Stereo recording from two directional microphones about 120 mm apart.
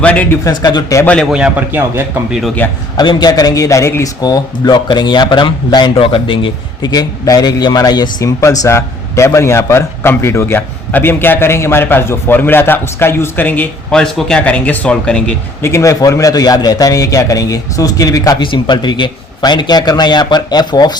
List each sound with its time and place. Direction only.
0.0 s a man's voice: 10° left (ahead or behind)
0.4 s speech: 35° left (ahead or behind)
1.0 s a man's voice: 10° left (ahead or behind)
1.3 s a man's voice: 5° right (ahead or behind)
2.6 s a man's voice: 15° left (ahead or behind)
3.0 s a man's voice: 40° left (ahead or behind); by 15.4 s 10° left (ahead or behind)
15.6 s a man's voice: 25° left (ahead or behind)
18.3 s speech: 40° left (ahead or behind)